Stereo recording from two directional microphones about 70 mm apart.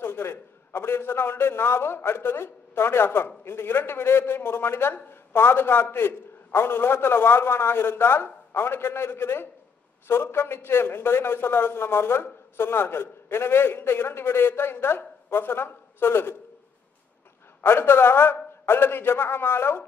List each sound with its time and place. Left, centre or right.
0.0 s a man's voice: left
17.6 s a man's voice: left